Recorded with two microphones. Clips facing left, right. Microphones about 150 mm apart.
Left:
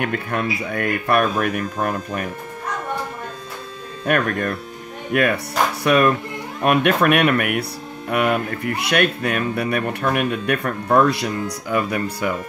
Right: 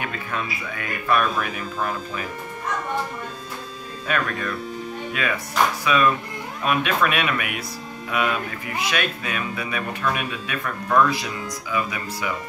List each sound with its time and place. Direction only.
0.0 s speech: 60° left (ahead or behind)
4.0 s speech: 60° left (ahead or behind)
10.6 s speech: 35° left (ahead or behind)
11.1 s speech: 55° left (ahead or behind)